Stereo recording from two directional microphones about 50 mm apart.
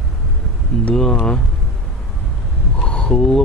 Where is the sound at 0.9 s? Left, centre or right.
Centre.